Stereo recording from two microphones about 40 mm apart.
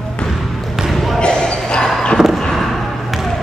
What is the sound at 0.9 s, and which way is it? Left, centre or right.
Basketball bounce, centre.